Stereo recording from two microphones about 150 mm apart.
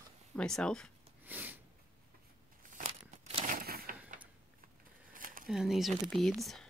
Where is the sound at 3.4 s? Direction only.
80° right.